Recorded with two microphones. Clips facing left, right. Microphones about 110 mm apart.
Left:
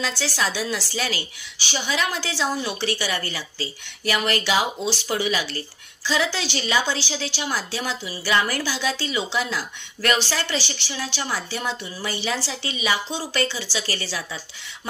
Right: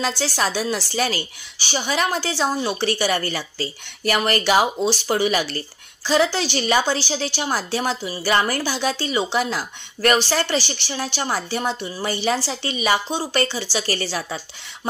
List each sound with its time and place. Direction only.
0.0 s a woman's voice: 45° right (ahead or behind)